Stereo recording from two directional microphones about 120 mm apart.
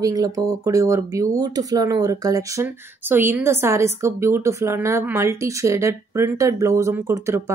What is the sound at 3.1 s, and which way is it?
A woman's voice, 20° right (ahead or behind).